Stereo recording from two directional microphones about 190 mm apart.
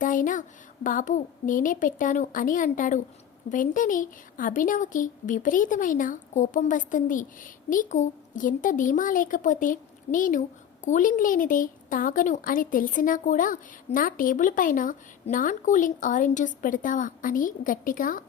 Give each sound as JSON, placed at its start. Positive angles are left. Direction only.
{"t": 0.0, "sound": "a woman's voice", "side_deg": 45}